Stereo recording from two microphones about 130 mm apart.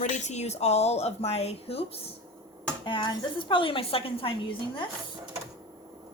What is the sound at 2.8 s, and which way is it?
A woman's voice, 40° left (ahead or behind).